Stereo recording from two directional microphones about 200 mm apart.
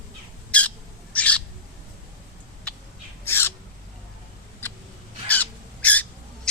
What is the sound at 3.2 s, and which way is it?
Owl, 10° left (ahead or behind).